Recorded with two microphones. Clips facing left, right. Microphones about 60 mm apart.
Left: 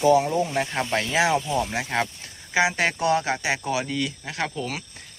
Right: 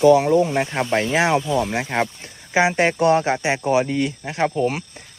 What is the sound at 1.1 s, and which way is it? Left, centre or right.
Speech, right.